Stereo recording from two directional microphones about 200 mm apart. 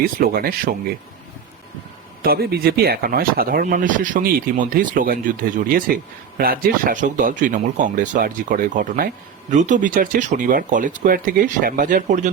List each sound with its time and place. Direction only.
0.0 s speech: 45° right (ahead or behind)
2.2 s speech: 50° right (ahead or behind)